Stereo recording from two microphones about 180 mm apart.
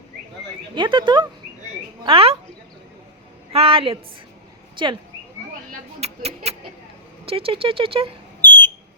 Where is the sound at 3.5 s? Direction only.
30° right (ahead or behind).